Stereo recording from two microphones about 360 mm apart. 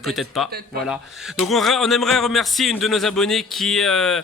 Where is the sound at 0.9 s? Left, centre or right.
Centre.